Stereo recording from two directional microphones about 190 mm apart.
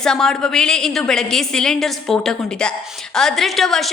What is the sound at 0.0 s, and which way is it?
A woman's voice, 5° left (ahead or behind).